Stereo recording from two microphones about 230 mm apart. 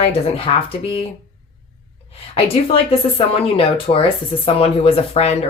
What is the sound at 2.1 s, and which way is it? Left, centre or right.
Speech, left.